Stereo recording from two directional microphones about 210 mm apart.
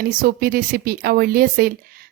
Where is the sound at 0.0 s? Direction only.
45° right (ahead or behind).